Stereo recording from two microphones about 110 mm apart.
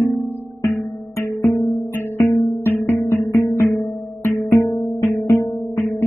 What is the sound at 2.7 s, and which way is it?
Music, 20° left (ahead or behind).